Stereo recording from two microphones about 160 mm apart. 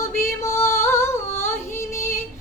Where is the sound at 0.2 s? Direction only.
15° left (ahead or behind).